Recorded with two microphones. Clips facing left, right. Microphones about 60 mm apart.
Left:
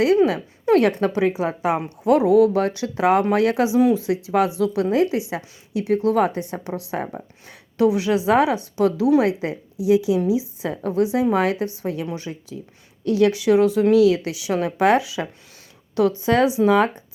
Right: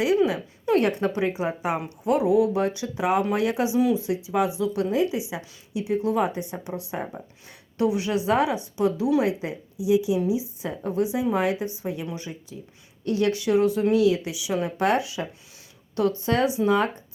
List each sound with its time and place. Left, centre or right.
0.3 s a woman's voice: left
1.5 s speech: left
2.0 s a woman's voice: left
7.8 s speech: left
8.6 s a woman's voice: left
10.6 s a woman's voice: left
13.1 s speech: left
14.3 s speech: left
14.6 s speech: left